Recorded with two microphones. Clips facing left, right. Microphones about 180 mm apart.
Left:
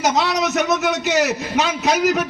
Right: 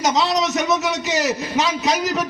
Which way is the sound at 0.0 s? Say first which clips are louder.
Even; 65° left (ahead or behind).